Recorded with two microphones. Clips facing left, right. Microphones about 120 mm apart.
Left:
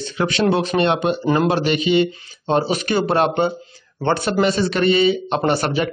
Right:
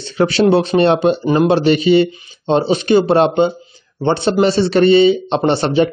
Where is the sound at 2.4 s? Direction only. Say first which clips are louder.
Right 4 dB; 25° right (ahead or behind).